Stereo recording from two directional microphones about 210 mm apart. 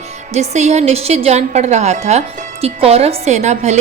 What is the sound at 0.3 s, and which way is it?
A woman's voice, 30° right (ahead or behind).